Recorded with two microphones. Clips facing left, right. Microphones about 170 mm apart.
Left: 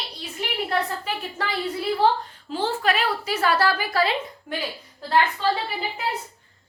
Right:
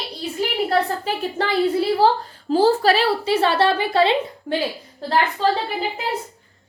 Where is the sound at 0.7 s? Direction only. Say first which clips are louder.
Right 5 dB; 35° right (ahead or behind).